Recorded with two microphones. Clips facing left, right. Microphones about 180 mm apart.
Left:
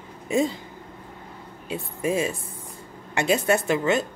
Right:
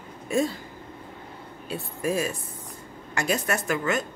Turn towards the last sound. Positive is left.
turn(degrees=25)  # may be behind; listen again after turning